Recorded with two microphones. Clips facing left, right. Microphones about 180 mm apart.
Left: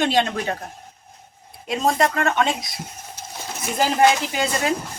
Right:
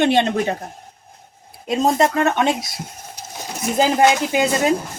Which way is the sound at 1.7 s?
20° right (ahead or behind).